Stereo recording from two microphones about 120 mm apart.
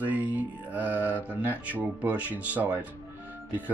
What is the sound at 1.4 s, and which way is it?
Speech, 15° right (ahead or behind).